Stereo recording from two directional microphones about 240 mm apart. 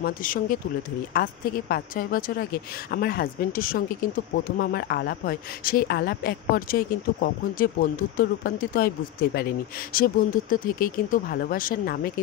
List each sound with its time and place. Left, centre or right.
0.0 s speech: left